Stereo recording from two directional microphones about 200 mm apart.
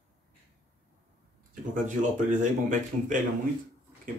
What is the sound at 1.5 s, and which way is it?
Speech, 40° right (ahead or behind).